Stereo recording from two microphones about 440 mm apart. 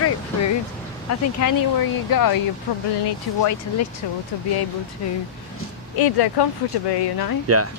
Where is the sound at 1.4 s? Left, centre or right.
Left.